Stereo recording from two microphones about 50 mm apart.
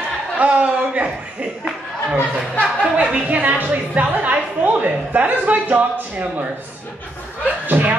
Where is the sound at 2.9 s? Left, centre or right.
Right.